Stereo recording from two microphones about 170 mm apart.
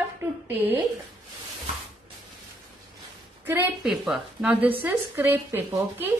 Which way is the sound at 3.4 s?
10° right (ahead or behind).